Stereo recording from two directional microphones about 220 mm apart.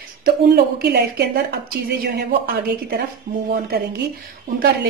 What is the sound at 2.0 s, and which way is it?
A woman's voice, 45° right (ahead or behind).